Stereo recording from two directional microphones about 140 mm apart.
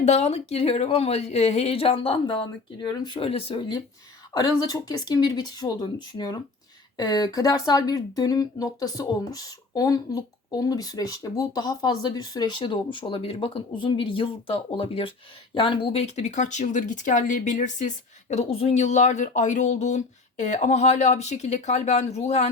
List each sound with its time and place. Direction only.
0.0 s speech: 50° left (ahead or behind)